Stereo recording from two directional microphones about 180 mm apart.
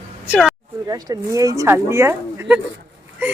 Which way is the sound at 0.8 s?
20° right (ahead or behind).